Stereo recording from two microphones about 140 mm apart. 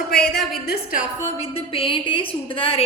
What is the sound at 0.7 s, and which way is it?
Speech, 70° left (ahead or behind).